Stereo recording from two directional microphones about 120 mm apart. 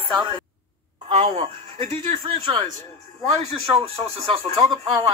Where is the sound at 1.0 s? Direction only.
50° right (ahead or behind).